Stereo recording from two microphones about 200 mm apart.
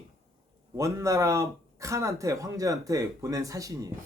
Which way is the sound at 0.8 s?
15° right (ahead or behind).